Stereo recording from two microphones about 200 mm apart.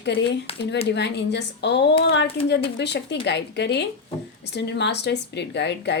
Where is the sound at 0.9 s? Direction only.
60° left (ahead or behind).